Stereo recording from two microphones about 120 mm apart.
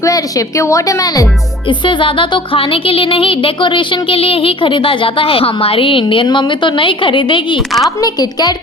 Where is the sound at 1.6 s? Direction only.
45° left (ahead or behind).